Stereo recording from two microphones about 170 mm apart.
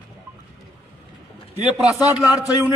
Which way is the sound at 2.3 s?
20° left (ahead or behind).